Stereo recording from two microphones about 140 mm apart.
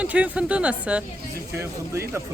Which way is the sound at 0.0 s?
10° right (ahead or behind).